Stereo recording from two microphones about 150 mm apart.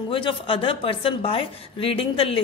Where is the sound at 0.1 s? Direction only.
35° left (ahead or behind).